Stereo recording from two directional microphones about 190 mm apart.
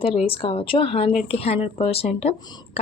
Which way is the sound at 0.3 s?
30° left (ahead or behind).